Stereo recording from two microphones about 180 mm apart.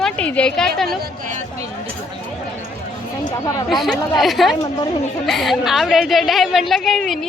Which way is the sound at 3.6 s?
Centre (ahead or behind).